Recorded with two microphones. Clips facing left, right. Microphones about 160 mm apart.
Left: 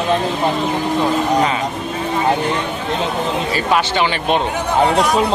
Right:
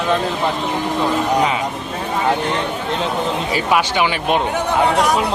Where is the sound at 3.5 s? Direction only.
10° right (ahead or behind).